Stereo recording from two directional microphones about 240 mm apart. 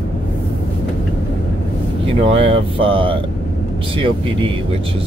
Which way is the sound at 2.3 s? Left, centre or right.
Right.